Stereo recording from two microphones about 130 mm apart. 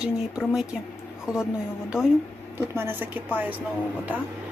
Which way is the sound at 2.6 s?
20° right (ahead or behind).